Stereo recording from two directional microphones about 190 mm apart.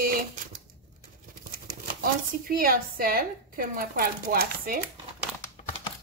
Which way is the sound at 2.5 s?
50° right (ahead or behind).